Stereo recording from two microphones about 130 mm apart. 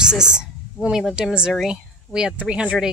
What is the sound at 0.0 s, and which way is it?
A woman's voice, 5° right (ahead or behind).